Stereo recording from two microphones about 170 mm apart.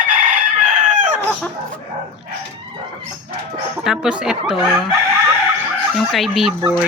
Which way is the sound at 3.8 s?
5° right (ahead or behind).